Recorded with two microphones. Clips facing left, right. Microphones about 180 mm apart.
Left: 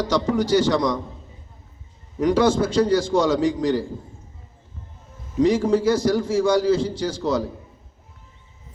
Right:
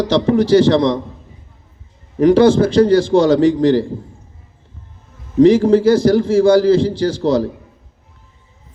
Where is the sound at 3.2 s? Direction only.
60° right (ahead or behind).